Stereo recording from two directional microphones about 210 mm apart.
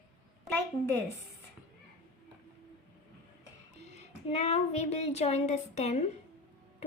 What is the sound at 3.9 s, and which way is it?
A child's voice, 30° left (ahead or behind).